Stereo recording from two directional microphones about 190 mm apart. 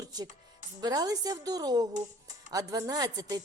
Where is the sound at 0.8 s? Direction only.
20° right (ahead or behind).